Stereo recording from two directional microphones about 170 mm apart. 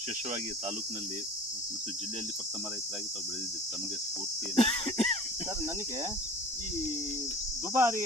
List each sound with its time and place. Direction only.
4.5 s speech: 35° left (ahead or behind)
7.7 s speech: 15° right (ahead or behind)